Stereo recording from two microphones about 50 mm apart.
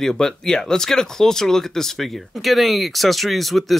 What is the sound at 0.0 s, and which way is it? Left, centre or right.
Speech, centre.